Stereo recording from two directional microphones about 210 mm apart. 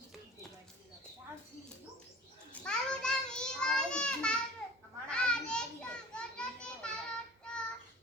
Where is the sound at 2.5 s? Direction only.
5° left (ahead or behind).